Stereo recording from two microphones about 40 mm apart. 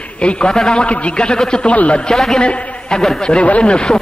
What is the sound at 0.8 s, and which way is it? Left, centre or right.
Speech, left.